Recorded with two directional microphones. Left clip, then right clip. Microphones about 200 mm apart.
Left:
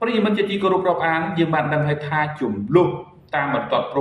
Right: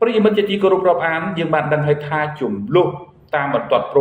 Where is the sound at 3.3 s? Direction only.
45° right (ahead or behind).